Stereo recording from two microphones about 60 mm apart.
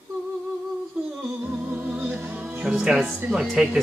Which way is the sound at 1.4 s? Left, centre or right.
Right.